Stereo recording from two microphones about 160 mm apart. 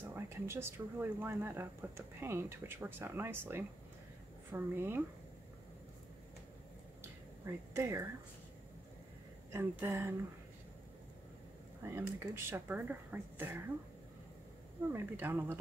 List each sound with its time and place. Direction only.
0.1 s speech: 15° right (ahead or behind)
7.0 s a sound: 15° right (ahead or behind)
9.5 s speech: 15° right (ahead or behind)
11.8 s speech: 15° right (ahead or behind)
14.9 s speech: 15° right (ahead or behind)